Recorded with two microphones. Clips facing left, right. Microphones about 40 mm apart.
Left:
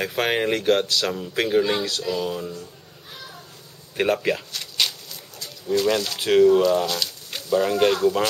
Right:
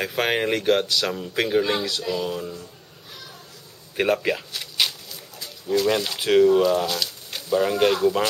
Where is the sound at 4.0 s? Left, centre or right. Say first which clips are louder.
Even; centre.